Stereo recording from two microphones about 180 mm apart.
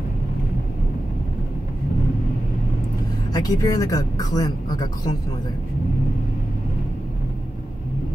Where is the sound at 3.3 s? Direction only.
20° left (ahead or behind).